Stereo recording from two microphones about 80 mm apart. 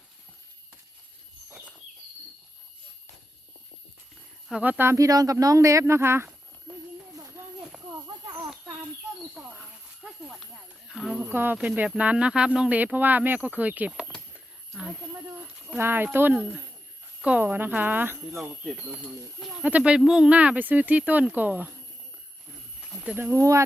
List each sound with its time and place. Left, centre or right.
4.5 s speech: centre
4.9 s speech: right
5.8 s speech: right
6.7 s a sound: centre
9.3 s a sound: centre
11.2 s speech: right
14.8 s snake: centre
15.8 s speech: right
18.2 s speech: centre
22.8 s a sound: centre
23.1 s speech: right